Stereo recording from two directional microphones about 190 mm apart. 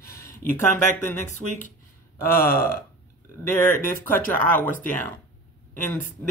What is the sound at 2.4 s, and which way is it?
Speech, 50° left (ahead or behind).